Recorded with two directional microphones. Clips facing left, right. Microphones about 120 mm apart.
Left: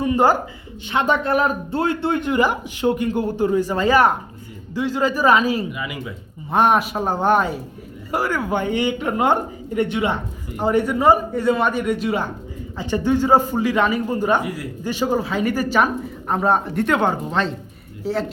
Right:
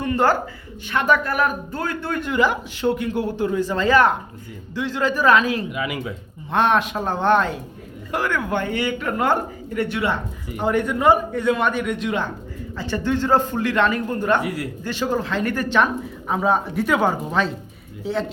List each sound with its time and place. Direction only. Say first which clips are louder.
0.0 s a sound: left 2 dB; 10° left (ahead or behind)
0.9 s a man's voice: left 1 dB; 25° left (ahead or behind)
3.1 s a man's voice: left 2 dB; 45° left (ahead or behind)
3.6 s a man's voice: right 1 dB; 10° left (ahead or behind)
5.7 s speech: right 3 dB; 90° right
6.5 s a man's voice: left 2 dB; 10° left (ahead or behind)
10.6 s a man's voice: left 2 dB; 5° left (ahead or behind)
14.4 s speech: right 1 dB; 75° right (ahead or behind)
14.8 s speech: left 3 dB; 15° left (ahead or behind)